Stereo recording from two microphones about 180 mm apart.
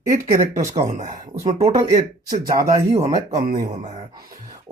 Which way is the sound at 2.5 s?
20° right (ahead or behind).